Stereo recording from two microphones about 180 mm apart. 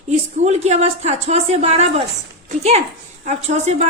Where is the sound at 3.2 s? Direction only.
40° right (ahead or behind).